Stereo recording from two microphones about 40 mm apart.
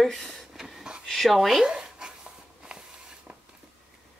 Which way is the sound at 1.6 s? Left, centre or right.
Centre.